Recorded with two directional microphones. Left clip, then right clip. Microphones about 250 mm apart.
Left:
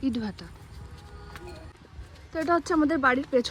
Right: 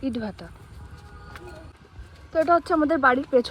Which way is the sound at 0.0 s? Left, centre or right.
Centre.